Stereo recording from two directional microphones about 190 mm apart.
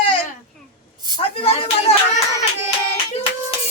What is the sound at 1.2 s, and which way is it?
Speech, 30° left (ahead or behind).